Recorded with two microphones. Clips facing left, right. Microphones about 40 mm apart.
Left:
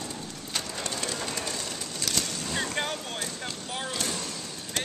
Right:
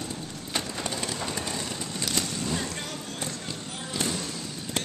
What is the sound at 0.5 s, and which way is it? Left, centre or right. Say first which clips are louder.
Train: right 2 dB; centre.